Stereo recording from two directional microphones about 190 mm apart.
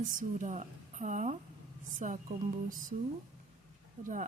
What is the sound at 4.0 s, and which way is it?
Speech, 45° right (ahead or behind).